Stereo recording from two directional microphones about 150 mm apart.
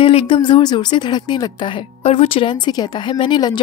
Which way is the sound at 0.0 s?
35° left (ahead or behind).